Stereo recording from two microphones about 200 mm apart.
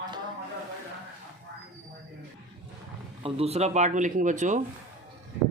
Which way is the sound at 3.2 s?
30° right (ahead or behind).